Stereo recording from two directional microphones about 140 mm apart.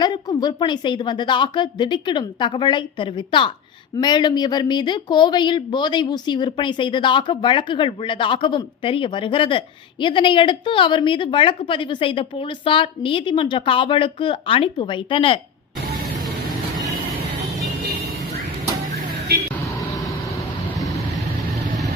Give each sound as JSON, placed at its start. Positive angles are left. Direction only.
{"t": 0.0, "sound": "speech", "side_deg": 30}